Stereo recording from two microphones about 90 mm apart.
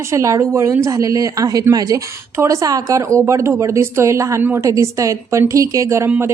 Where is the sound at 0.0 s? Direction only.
35° right (ahead or behind).